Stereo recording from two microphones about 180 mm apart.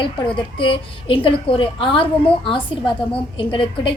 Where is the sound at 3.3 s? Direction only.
30° left (ahead or behind).